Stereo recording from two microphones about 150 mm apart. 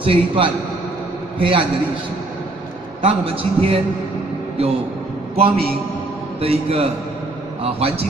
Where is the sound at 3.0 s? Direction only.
40° right (ahead or behind).